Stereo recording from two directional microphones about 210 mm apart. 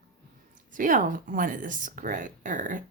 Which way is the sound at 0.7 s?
40° right (ahead or behind).